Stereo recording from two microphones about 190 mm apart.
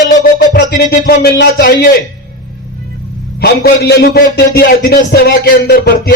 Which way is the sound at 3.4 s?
55° left (ahead or behind).